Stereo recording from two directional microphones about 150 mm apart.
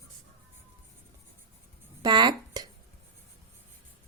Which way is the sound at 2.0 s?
30° right (ahead or behind).